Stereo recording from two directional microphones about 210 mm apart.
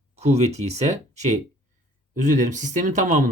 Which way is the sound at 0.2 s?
30° right (ahead or behind).